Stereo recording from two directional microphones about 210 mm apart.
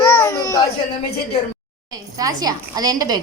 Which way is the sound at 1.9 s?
15° right (ahead or behind).